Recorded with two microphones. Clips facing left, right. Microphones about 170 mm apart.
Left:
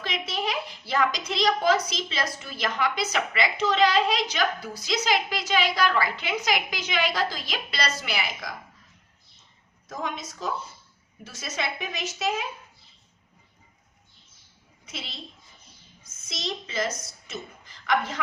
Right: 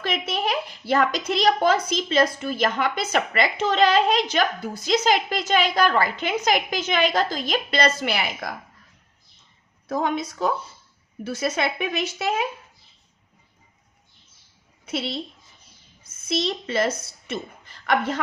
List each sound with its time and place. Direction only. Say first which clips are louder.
0.0 s speech: right 4 dB; 55° right (ahead or behind)
9.9 s a woman's voice: right 9 dB; 65° right (ahead or behind)
14.8 s a woman's voice: right 13 dB; 60° right (ahead or behind)
16.6 s a woman's voice: right 5 dB; 60° right (ahead or behind)
17.2 s a sound: right 8 dB; 55° right (ahead or behind)